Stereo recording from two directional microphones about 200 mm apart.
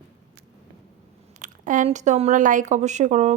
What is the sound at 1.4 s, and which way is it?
Speech, 40° right (ahead or behind).